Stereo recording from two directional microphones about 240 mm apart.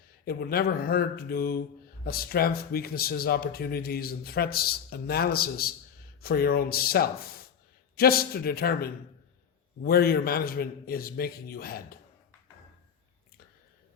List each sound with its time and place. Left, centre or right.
0.3 s speech: left